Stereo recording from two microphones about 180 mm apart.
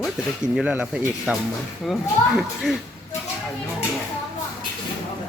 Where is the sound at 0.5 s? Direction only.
5° right (ahead or behind).